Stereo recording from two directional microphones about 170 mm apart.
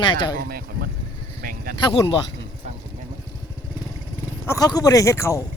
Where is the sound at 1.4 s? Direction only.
55° right (ahead or behind).